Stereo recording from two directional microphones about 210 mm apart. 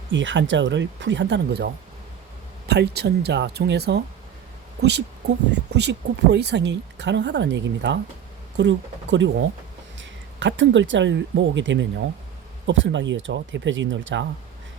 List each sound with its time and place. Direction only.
0.1 s speech: 60° right (ahead or behind)